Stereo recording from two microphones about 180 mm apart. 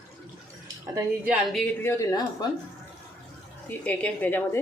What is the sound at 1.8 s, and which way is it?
Speech, 15° left (ahead or behind).